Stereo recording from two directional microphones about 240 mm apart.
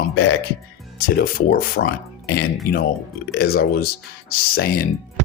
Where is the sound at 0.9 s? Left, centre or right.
Left.